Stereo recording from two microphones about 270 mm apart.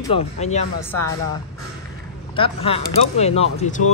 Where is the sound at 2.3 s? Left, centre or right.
Left.